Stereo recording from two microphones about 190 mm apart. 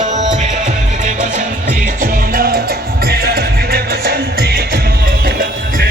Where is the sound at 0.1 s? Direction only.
40° right (ahead or behind).